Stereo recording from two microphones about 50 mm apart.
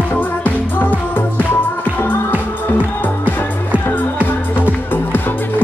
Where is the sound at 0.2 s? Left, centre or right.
Left.